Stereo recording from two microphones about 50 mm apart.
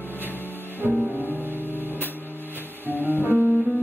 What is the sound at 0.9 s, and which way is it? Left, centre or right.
Music, right.